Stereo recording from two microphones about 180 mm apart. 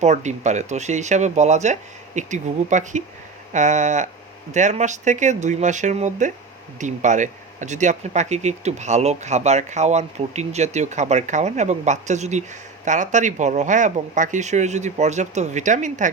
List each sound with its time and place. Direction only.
0.0 s speech: 40° right (ahead or behind)